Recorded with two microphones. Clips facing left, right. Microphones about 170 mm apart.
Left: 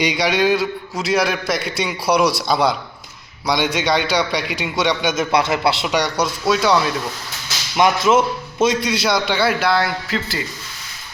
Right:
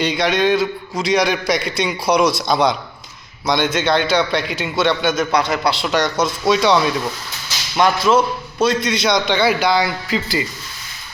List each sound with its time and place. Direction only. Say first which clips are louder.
0.0 s a man's voice: right 1 dB; 10° left (ahead or behind)
5.8 s a man's voice: right 1 dB; 10° left (ahead or behind)
7.8 s a man's voice: even; 20° left (ahead or behind); by 10.4 s centre (ahead or behind)